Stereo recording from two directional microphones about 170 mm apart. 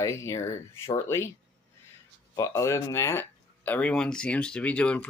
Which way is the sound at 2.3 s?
20° left (ahead or behind).